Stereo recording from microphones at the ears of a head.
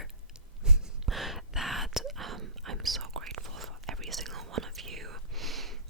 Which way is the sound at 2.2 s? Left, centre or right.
Right.